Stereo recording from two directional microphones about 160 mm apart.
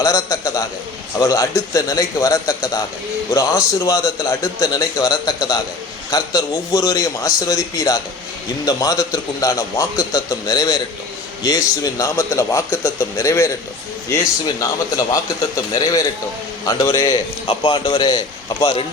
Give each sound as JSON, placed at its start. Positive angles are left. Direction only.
{"t": 0.0, "sound": "a man's voice", "side_deg": 20}
{"t": 14.6, "sound": "a man's voice", "side_deg": 20}
{"t": 17.4, "sound": "a man's voice", "side_deg": 30}